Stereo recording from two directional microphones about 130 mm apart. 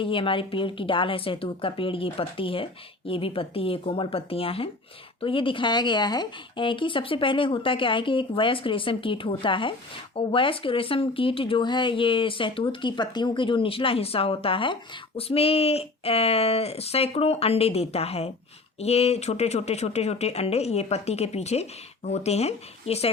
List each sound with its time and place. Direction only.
0.0 s speech: 40° left (ahead or behind)